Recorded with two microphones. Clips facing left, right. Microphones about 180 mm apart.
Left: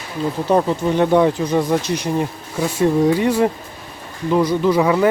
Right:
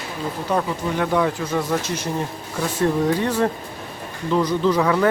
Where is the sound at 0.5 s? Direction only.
25° left (ahead or behind).